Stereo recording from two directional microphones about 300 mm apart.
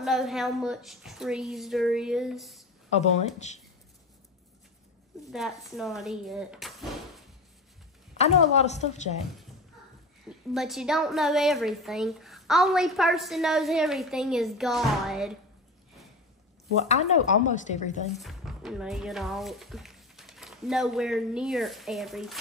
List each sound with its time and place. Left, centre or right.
0.0 s a woman's voice: centre
2.9 s speech: left
5.3 s speech: centre
8.2 s speech: left
10.5 s a woman's voice: centre
16.7 s speech: left
18.1 s speech: centre